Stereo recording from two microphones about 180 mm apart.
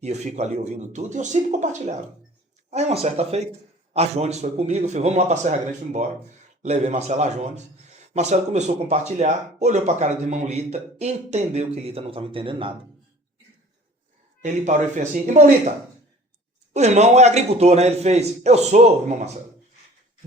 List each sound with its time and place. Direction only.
0.0 s speech: 40° right (ahead or behind)
14.4 s speech: 45° right (ahead or behind)
16.7 s speech: 40° right (ahead or behind)